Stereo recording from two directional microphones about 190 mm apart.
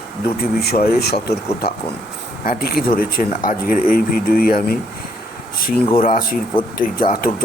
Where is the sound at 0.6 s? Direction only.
55° left (ahead or behind).